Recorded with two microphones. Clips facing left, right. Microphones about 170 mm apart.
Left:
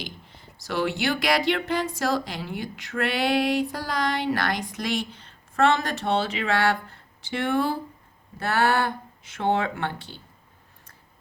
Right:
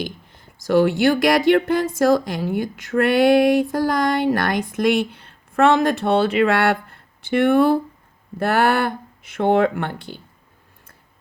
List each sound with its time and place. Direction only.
0.0 s speech: 50° right (ahead or behind)